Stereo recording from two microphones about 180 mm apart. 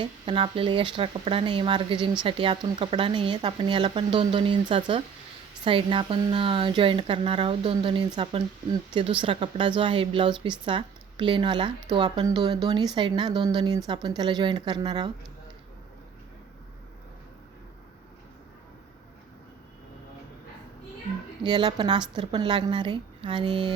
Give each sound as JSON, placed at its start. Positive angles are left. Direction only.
{"t": 0.0, "sound": "speech", "side_deg": -25}
{"t": 21.4, "sound": "speech", "side_deg": -25}